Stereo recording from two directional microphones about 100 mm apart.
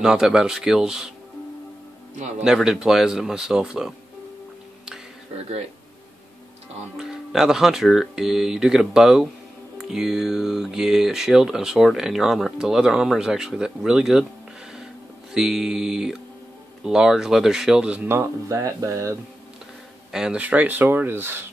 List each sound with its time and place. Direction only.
0.0 s speech: 5° right (ahead or behind)
2.4 s speech: 5° right (ahead or behind)
7.0 s speech: 5° right (ahead or behind)
15.3 s speech: 5° right (ahead or behind)
18.0 s speech: 25° right (ahead or behind)
20.1 s speech: 5° right (ahead or behind); by 21.5 s 20° right (ahead or behind)